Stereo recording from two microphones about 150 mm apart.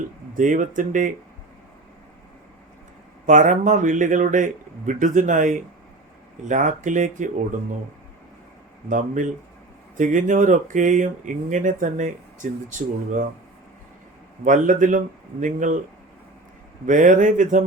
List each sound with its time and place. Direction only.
0.3 s speech: 60° right (ahead or behind)
3.2 s speech: 55° right (ahead or behind)
8.9 s speech: 60° right (ahead or behind)
14.4 s speech: 60° right (ahead or behind)
16.8 s speech: 60° right (ahead or behind)